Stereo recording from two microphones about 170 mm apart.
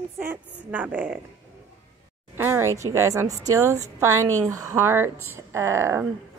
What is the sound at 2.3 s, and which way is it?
A woman's voice, 15° right (ahead or behind).